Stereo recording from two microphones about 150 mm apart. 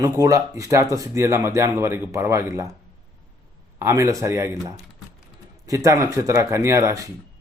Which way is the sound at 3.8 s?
20° right (ahead or behind).